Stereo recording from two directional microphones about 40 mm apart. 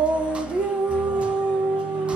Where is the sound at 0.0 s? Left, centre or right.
Right.